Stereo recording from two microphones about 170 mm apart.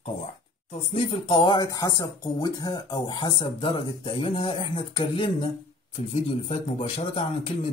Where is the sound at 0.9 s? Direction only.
35° left (ahead or behind).